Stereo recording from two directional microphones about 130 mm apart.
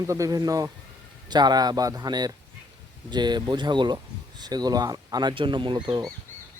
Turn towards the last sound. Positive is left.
turn(degrees=-35)  # may be behind; listen again after turning